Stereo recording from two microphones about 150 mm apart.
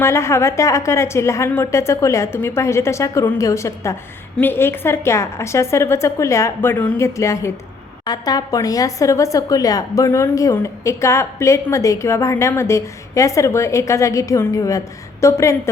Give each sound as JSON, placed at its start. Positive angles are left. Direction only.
{"t": 0.0, "sound": "a woman's voice", "side_deg": 20}